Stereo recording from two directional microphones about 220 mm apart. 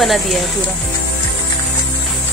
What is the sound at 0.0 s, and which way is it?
Speech, centre (ahead or behind).